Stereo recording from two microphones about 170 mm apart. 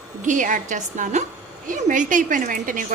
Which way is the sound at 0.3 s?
50° right (ahead or behind).